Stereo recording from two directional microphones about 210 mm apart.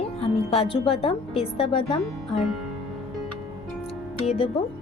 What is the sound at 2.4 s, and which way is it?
Music, centre (ahead or behind).